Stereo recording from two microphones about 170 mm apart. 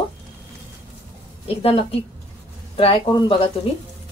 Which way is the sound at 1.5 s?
35° left (ahead or behind).